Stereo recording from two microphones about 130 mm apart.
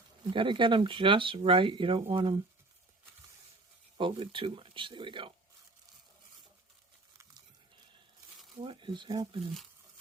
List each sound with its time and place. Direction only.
0.3 s speech: 40° right (ahead or behind)
3.9 s speech: 40° right (ahead or behind)
8.6 s speech: 40° right (ahead or behind)